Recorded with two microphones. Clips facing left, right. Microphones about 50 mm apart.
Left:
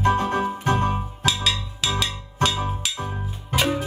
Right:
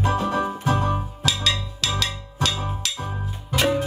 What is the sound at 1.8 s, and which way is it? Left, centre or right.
Music, centre.